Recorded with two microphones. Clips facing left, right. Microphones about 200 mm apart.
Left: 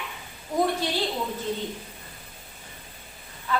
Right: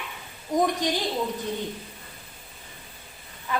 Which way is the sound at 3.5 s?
20° right (ahead or behind).